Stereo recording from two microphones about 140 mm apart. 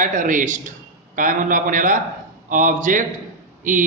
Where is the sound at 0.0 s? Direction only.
70° right (ahead or behind).